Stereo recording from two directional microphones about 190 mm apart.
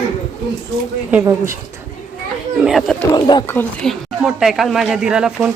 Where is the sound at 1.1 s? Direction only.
15° right (ahead or behind).